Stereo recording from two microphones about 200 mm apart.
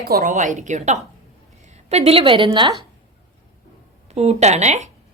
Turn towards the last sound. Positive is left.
turn(degrees=-35)  # may be behind; listen again after turning